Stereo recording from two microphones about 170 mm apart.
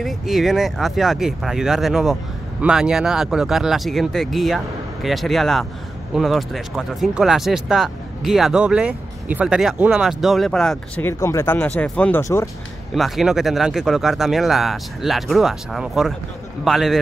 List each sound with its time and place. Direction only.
0.0 s speech: centre (ahead or behind)
11.1 s speech: 15° left (ahead or behind)
12.9 s speech: centre (ahead or behind)